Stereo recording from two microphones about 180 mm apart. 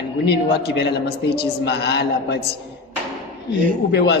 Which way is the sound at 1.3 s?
65° left (ahead or behind).